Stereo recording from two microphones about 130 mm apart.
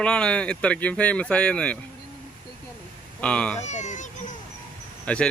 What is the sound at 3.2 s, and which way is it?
Speech, 10° left (ahead or behind).